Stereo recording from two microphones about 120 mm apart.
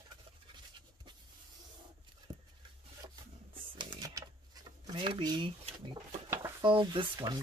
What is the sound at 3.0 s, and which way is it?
Rub, 40° right (ahead or behind).